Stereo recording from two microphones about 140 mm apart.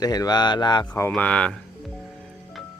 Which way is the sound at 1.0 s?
10° left (ahead or behind).